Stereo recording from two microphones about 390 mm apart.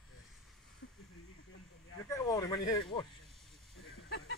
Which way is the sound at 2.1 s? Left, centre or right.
Centre.